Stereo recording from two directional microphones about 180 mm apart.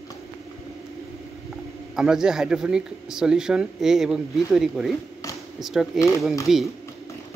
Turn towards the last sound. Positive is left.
turn(degrees=0)  # may be behind; listen again after turning